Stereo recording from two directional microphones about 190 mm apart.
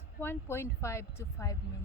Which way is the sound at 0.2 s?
10° left (ahead or behind).